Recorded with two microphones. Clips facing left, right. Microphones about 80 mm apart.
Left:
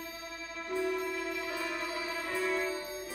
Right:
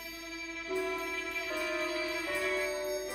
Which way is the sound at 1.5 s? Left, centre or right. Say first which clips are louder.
Right 1 dB; centre.